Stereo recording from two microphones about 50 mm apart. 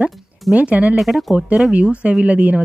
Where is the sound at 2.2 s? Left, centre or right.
Right.